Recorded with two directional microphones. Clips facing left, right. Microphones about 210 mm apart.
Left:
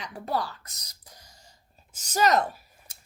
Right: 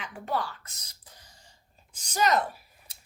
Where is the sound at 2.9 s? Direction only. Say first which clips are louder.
Left 2 dB; 45° left (ahead or behind).